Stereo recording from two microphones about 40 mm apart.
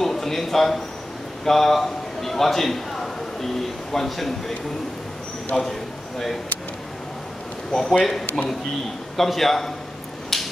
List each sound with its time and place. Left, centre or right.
0.0 s speech: centre
1.4 s a sound: centre
3.9 s speech: centre
5.5 s a man's voice: centre
6.1 s speech: centre
7.7 s a man's voice: centre
10.3 s a sound: centre